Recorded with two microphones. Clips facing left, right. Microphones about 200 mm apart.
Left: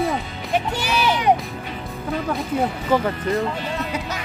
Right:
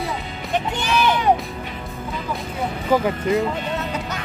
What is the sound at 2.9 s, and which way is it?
Speech, 5° right (ahead or behind).